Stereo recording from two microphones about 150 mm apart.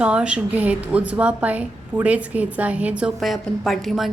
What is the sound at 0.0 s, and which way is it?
A woman's voice, 5° right (ahead or behind).